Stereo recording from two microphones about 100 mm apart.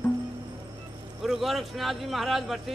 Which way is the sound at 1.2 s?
Centre (ahead or behind).